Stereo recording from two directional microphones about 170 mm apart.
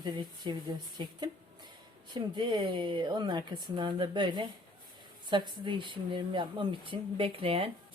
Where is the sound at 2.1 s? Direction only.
25° right (ahead or behind).